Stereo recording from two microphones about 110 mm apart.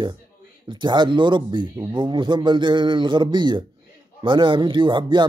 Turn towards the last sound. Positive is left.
turn(degrees=-45)  # may be behind; listen again after turning